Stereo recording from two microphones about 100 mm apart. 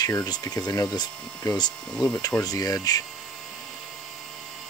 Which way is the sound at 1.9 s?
10° left (ahead or behind).